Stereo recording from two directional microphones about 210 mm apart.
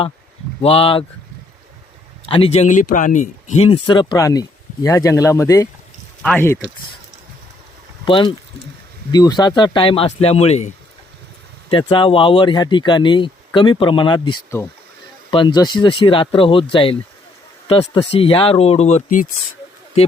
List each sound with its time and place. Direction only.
0.6 s speech: 25° left (ahead or behind)
2.3 s speech: 30° left (ahead or behind); by 6.6 s 10° left (ahead or behind)
8.0 s speech: 25° left (ahead or behind)
11.7 s speech: 20° left (ahead or behind)
18.1 s speech: 25° left (ahead or behind)